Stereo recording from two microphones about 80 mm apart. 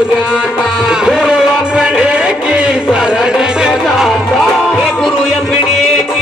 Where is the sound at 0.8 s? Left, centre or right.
Centre.